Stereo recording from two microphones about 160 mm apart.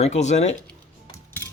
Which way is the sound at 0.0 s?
45° left (ahead or behind).